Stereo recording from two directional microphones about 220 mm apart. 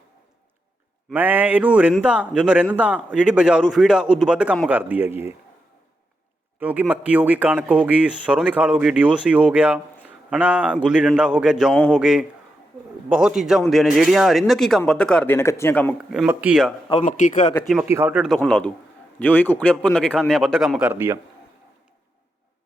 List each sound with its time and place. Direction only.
1.1 s a man's voice: 10° right (ahead or behind)
6.6 s a man's voice: 5° right (ahead or behind)
16.9 s a man's voice: 35° left (ahead or behind)
17.5 s a man's voice: 5° left (ahead or behind)
18.3 s a man's voice: 5° left (ahead or behind)